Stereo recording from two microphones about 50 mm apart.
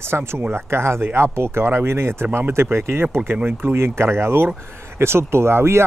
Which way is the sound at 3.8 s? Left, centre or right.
Right.